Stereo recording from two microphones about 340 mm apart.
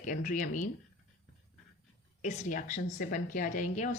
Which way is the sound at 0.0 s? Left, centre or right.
Left.